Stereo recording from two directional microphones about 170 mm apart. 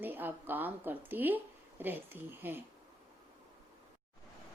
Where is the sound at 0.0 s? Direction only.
10° right (ahead or behind).